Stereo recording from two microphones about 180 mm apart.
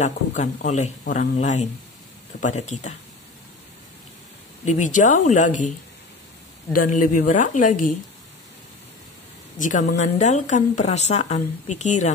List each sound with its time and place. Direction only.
0.0 s speech: 40° left (ahead or behind)
4.6 s a woman's voice: 45° left (ahead or behind)
6.7 s a woman's voice: 50° left (ahead or behind)
9.6 s speech: 45° left (ahead or behind)